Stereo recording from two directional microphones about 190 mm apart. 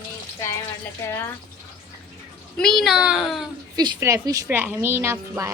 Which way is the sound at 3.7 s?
20° right (ahead or behind).